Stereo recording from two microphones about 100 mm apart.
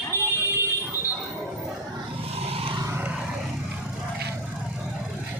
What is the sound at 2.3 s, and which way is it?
Vehicle, 80° right.